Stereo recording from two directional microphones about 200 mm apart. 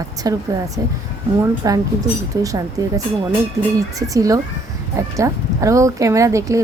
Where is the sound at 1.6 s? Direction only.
15° right (ahead or behind).